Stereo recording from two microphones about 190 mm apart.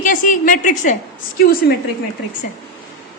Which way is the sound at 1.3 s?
50° left (ahead or behind).